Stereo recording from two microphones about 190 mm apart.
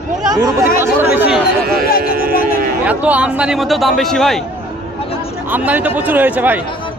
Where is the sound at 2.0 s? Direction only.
50° right (ahead or behind).